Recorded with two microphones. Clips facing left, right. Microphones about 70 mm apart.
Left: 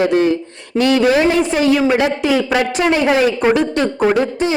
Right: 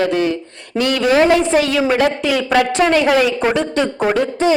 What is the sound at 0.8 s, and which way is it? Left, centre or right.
Speech, right.